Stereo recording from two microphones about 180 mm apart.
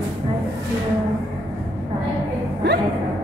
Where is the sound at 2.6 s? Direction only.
65° right (ahead or behind).